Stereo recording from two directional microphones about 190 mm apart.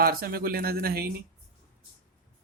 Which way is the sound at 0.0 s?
50° right (ahead or behind).